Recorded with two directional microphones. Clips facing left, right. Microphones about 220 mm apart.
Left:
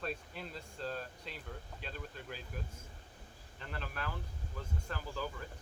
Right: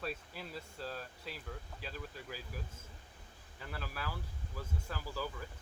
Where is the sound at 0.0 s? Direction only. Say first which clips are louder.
Left 1 dB; 5° right (ahead or behind).